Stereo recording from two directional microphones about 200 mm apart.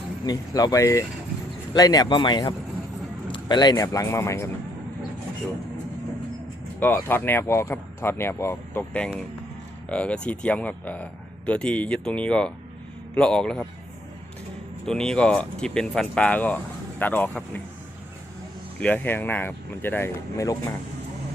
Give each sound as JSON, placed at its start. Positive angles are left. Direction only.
{"t": 0.3, "sound": "speech", "side_deg": 20}
{"t": 6.7, "sound": "speech", "side_deg": 10}
{"t": 14.8, "sound": "speech", "side_deg": 5}
{"t": 18.8, "sound": "speech", "side_deg": 10}